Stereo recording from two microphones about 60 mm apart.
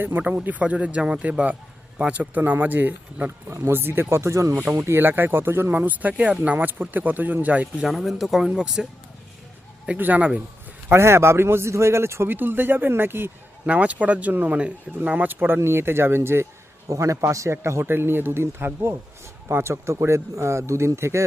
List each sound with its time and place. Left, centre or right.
0.0 s speech: right
0.4 s speech: right
3.5 s speech: right
4.1 s speech: right
4.6 s speech: right
4.9 s speech: right
5.7 s speech: right
7.9 s speech: centre
8.4 s speech: centre
10.0 s speech: right
10.9 s speech: right
12.3 s speech: right
13.7 s speech: right
16.9 s speech: right